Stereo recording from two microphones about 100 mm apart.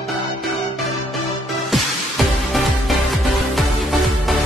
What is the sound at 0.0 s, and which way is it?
Music, centre (ahead or behind).